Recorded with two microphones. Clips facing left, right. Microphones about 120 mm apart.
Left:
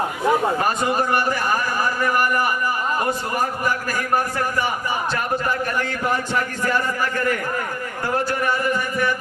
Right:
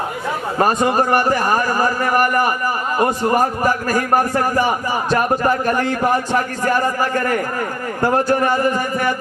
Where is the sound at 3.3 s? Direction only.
40° right (ahead or behind).